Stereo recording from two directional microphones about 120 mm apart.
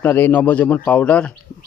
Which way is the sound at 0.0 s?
15° left (ahead or behind).